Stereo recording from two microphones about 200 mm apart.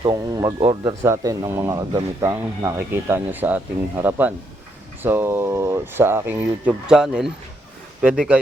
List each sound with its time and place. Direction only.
0.0 s speech: 20° right (ahead or behind); by 8.4 s 5° right (ahead or behind)